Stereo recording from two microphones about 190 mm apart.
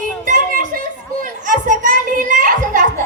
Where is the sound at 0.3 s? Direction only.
40° right (ahead or behind).